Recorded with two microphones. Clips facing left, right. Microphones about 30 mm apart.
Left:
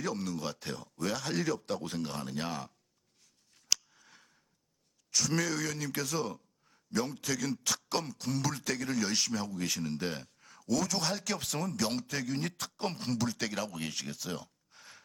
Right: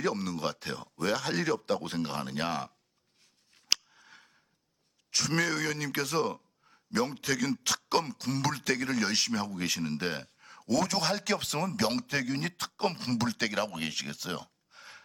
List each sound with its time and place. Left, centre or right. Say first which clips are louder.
0.0 s a man's voice: right 4 dB; centre
3.5 s scissors: right 3 dB; right
5.1 s a man's voice: right 2 dB; right
7.3 s speech: right 2 dB; centre
7.9 s beatboxing: right 7 dB; right
8.1 s a man's voice: right 3 dB; right
13.9 s a sound: right 3 dB; centre